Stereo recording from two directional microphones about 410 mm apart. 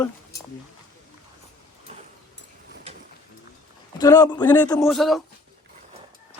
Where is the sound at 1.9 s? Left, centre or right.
Centre.